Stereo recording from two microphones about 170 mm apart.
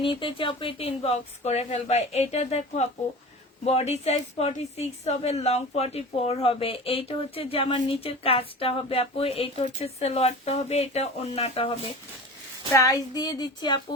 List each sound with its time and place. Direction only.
0.0 s a woman's voice: 30° left (ahead or behind)
12.7 s child singing: 20° left (ahead or behind)